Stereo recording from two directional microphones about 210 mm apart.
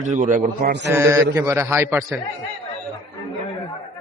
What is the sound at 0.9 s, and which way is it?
Speech, 15° right (ahead or behind).